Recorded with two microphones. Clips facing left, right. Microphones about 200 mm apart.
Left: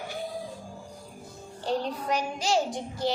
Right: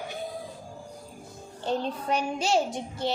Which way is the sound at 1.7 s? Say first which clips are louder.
Even; 25° right (ahead or behind).